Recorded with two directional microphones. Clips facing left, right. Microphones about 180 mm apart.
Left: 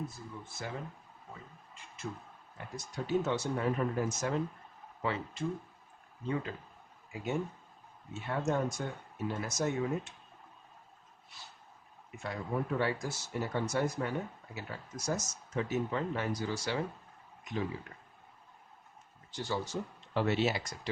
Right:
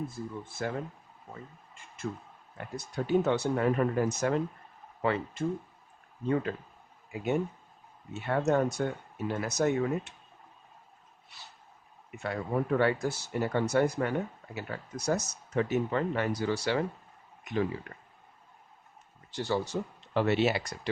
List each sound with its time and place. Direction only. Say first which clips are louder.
0.1 s speech: right 7 dB; 55° right (ahead or behind)
2.0 s speech: right 5 dB; 55° right (ahead or behind)
8.1 s speech: right 6 dB; 65° right (ahead or behind)
12.1 s speech: right 5 dB; 65° right (ahead or behind)
19.3 s speech: right 5 dB; 65° right (ahead or behind)